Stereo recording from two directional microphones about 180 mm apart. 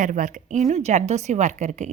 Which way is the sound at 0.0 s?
45° right (ahead or behind).